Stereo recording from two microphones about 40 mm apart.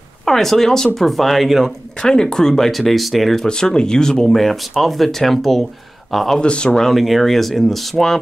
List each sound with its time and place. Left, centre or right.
0.2 s speech: centre
2.0 s speech: centre
3.4 s speech: left; by 5.7 s centre
6.4 s speech: left
6.7 s speech: centre